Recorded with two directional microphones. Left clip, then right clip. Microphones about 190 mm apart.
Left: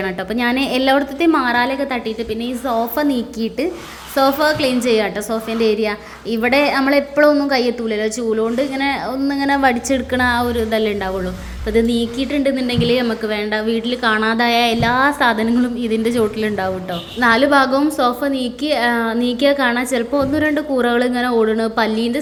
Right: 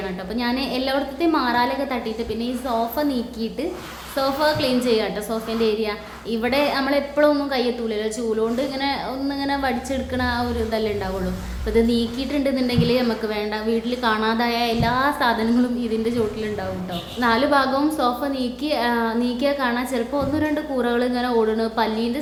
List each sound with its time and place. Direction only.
0.3 s a woman's voice: 35° left (ahead or behind)